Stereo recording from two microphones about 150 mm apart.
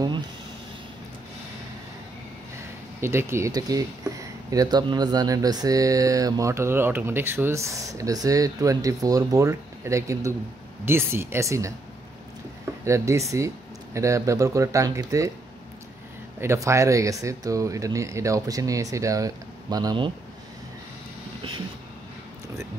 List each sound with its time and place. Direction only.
3.0 s speech: 15° right (ahead or behind)
12.8 s speech: 20° right (ahead or behind)
16.3 s speech: 20° right (ahead or behind)
21.4 s vehicle: 35° right (ahead or behind)